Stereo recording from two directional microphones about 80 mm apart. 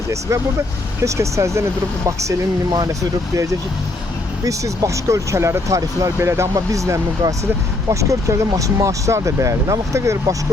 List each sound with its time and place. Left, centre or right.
1.0 s speech: right
2.7 s speech: right